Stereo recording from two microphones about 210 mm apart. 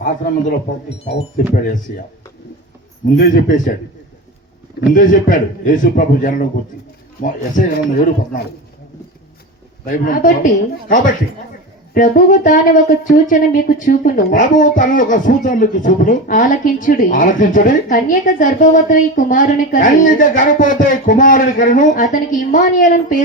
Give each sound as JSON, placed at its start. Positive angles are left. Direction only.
{"t": 0.0, "sound": "speech", "side_deg": 40}
{"t": 3.2, "sound": "speech", "side_deg": 40}
{"t": 4.9, "sound": "speech", "side_deg": 40}
{"t": 9.8, "sound": "speech", "side_deg": 40}